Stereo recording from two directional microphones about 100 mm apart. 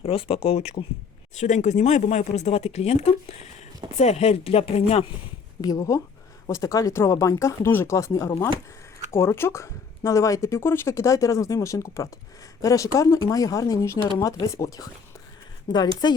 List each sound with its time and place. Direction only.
0.0 s speech: 70° left (ahead or behind)
1.8 s speech: 90° left
5.6 s speech: 35° left (ahead or behind)